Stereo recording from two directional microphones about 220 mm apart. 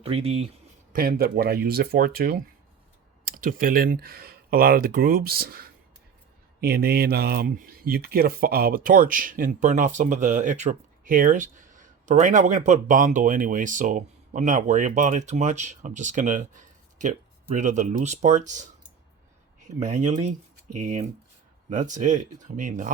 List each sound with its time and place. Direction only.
0.0 s speech: 25° right (ahead or behind)
0.9 s speech: 45° right (ahead or behind)
21.7 s speech: 35° right (ahead or behind)